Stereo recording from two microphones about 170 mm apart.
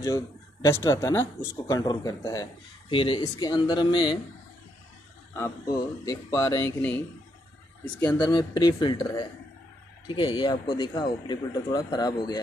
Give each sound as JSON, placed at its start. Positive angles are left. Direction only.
{"t": 0.0, "sound": "speech", "side_deg": 15}
{"t": 5.3, "sound": "speech", "side_deg": 15}
{"t": 8.1, "sound": "speech", "side_deg": 25}